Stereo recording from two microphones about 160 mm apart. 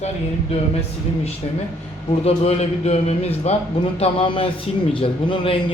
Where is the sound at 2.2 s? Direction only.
40° left (ahead or behind).